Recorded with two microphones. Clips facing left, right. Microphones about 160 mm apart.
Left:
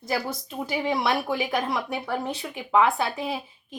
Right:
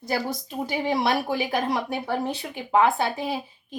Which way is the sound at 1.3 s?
45° right (ahead or behind).